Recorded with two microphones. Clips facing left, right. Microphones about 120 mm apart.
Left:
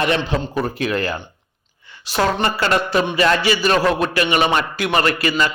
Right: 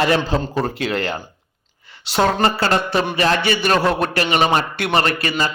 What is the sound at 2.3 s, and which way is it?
Speech, 35° right (ahead or behind).